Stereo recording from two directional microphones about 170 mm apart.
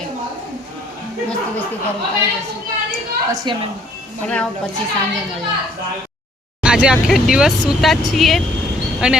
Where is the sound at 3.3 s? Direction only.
25° right (ahead or behind).